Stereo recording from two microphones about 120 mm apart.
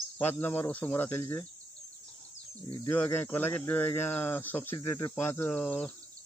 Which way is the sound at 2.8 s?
15° left (ahead or behind).